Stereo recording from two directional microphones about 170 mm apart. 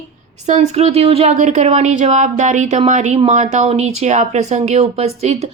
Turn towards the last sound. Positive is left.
turn(degrees=-40)  # may be behind; listen again after turning